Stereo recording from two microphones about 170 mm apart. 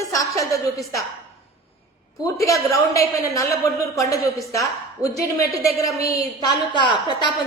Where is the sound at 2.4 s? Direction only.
20° left (ahead or behind).